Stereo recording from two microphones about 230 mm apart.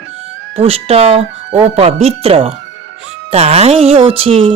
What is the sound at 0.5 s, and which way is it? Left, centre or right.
Speech, right.